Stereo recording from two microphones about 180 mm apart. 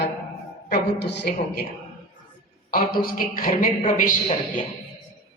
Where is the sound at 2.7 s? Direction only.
55° left (ahead or behind).